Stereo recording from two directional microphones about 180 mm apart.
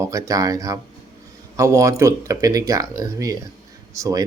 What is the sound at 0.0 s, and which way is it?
Speech, 15° right (ahead or behind).